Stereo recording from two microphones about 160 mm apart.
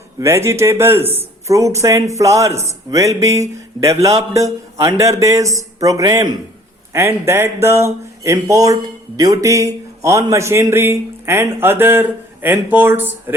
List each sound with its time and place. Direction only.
0.2 s speech: 15° right (ahead or behind)